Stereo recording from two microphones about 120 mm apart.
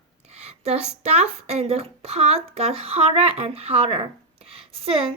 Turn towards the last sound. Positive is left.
turn(degrees=-50)  # may be behind; listen again after turning